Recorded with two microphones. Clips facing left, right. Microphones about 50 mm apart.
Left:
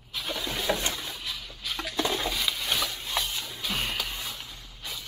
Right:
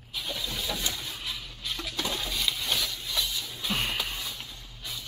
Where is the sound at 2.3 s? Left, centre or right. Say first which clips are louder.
Left 1 dB; centre.